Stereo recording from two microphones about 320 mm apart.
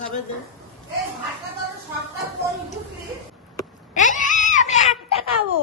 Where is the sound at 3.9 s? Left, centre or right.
Left.